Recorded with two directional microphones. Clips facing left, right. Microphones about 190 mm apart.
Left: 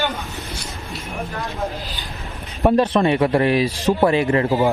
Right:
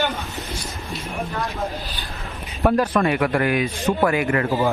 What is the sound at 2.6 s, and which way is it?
A man's voice, 20° left (ahead or behind).